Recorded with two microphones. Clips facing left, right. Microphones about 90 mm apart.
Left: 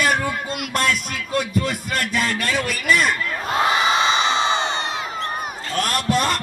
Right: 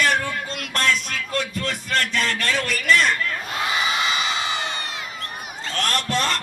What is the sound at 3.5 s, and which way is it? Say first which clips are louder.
Crowd: left 6 dB; 25° left (ahead or behind).